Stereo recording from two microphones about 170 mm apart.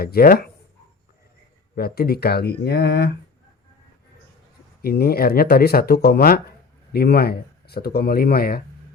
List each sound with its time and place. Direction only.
0.0 s speech: 65° left (ahead or behind)
1.7 s speech: 65° left (ahead or behind)
4.8 s speech: 65° left (ahead or behind)